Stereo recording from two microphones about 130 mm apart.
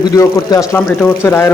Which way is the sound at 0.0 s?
30° left (ahead or behind).